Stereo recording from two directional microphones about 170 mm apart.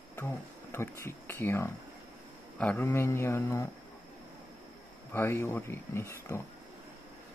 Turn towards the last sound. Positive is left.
turn(degrees=15)  # may be behind; listen again after turning